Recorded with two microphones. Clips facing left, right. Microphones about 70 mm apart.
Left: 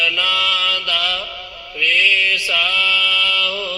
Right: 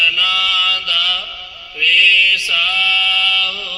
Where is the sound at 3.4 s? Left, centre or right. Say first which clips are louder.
Left 1 dB; left.